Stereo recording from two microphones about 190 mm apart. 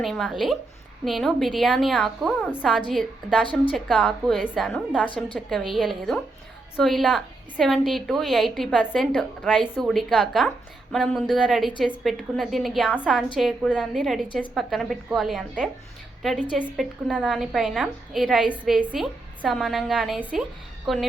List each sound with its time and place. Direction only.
0.0 s a woman's voice: centre (ahead or behind)